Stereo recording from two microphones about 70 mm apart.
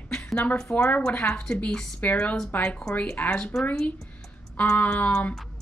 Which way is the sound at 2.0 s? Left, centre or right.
Left.